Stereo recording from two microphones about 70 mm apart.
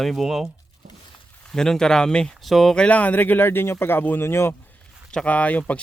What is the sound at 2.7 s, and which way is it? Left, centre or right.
Speech, centre.